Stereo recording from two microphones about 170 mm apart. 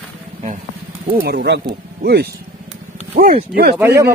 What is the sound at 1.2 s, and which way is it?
Speech, 65° right (ahead or behind).